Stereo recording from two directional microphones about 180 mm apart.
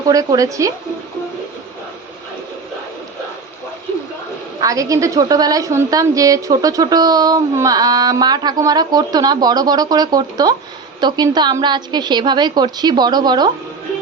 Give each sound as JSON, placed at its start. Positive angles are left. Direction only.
{"t": 0.1, "sound": "a woman's voice", "side_deg": -20}
{"t": 4.6, "sound": "a woman's voice", "side_deg": -20}